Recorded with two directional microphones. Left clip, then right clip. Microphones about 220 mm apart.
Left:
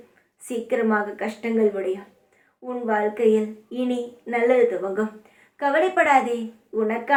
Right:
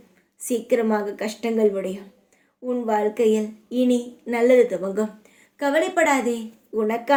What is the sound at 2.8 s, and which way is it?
A woman's voice, 50° right (ahead or behind).